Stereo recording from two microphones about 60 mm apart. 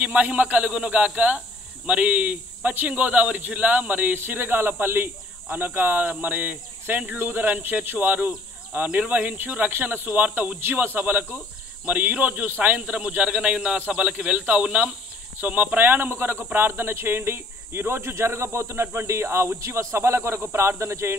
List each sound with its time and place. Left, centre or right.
0.0 s speech: right
4.1 s speech: right